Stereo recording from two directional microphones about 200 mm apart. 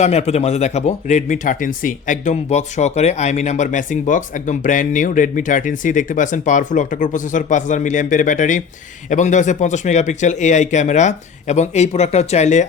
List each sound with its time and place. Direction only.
0.0 s speech: 30° left (ahead or behind)